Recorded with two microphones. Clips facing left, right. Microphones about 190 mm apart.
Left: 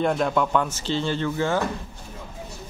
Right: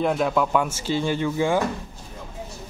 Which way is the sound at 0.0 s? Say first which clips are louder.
Even; 5° right (ahead or behind).